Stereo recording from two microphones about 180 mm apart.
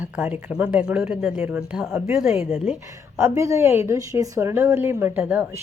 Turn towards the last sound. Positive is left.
turn(degrees=-10)  # may be behind; listen again after turning